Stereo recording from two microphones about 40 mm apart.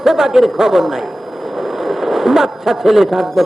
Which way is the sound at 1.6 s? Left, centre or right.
Centre.